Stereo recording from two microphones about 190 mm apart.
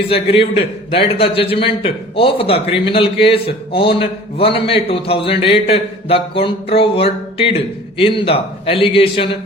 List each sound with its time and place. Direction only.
0.1 s a man's voice: 30° left (ahead or behind)